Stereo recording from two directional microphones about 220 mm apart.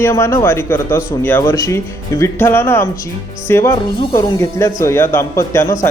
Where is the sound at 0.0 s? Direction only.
10° left (ahead or behind).